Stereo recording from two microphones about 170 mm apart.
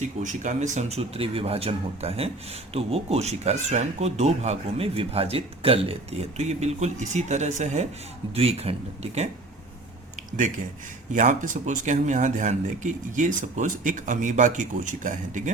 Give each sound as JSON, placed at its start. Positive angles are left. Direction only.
{"t": 0.2, "sound": "speech", "side_deg": -45}
{"t": 11.1, "sound": "speech", "side_deg": -50}